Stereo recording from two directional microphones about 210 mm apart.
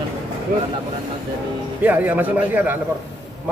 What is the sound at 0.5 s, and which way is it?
Speech, 40° right (ahead or behind).